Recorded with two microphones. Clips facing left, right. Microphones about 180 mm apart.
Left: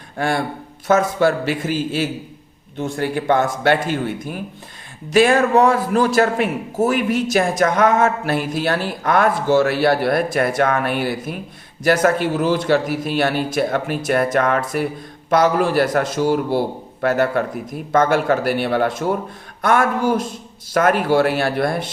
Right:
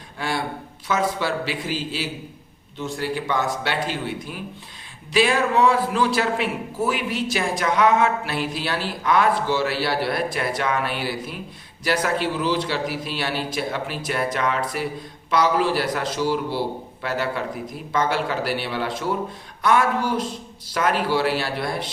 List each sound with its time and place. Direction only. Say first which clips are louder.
0.2 s a man's voice: left 6 dB; 50° left (ahead or behind)